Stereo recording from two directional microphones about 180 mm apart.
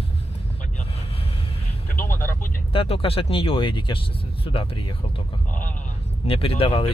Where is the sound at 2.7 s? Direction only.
30° left (ahead or behind).